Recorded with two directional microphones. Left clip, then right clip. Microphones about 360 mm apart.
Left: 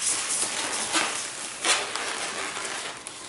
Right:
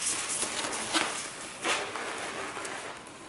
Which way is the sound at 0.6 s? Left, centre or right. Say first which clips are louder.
Left 3 dB; centre.